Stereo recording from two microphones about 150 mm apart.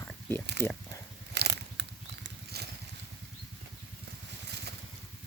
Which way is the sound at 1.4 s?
90° right.